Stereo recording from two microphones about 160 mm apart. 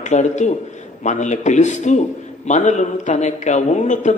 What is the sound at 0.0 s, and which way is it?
A man's voice, 50° left (ahead or behind).